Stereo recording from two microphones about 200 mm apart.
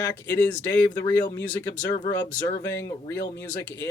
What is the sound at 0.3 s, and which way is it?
Speech, 5° left (ahead or behind).